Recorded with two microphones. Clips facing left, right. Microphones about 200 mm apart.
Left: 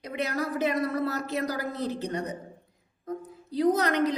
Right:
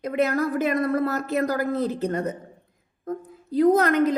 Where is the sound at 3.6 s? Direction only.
50° right (ahead or behind).